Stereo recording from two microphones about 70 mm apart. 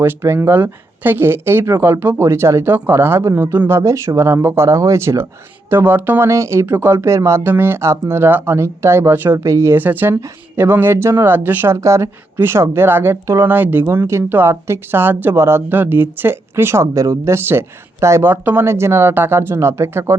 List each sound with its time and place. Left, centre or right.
0.0 s speech: right
2.2 s speech: right
2.7 s speech: right
5.7 s speech: right
6.2 s speech: right
6.7 s speech: right
7.0 s speech: right
7.4 s speech: right
8.5 s speech: right
9.4 s speech: right
9.7 s speech: right
11.8 s speech: right
12.4 s speech: right